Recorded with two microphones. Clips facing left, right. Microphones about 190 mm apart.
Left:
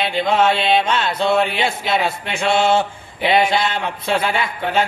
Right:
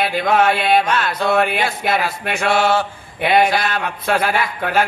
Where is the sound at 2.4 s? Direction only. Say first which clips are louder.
Left 1 dB; 25° left (ahead or behind).